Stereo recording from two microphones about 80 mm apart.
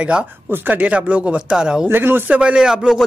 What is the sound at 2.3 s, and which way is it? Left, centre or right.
Speech, centre.